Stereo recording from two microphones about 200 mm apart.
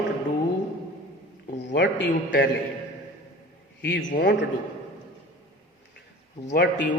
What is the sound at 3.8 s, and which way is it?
Speech, 65° left (ahead or behind).